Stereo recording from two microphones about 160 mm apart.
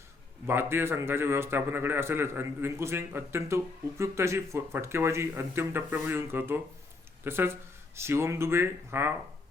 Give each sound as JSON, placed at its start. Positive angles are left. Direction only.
{"t": 0.4, "sound": "a man's voice", "side_deg": -15}